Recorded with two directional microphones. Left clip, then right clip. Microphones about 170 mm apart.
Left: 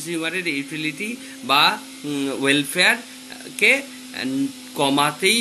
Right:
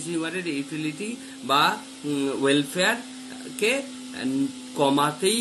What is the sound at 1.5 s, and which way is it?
Speech, 20° left (ahead or behind).